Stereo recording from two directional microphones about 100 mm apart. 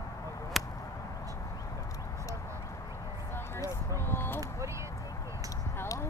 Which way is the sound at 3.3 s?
25° left (ahead or behind).